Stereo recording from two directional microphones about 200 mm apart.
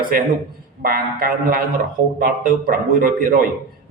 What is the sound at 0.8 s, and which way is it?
A man's voice, 45° right (ahead or behind).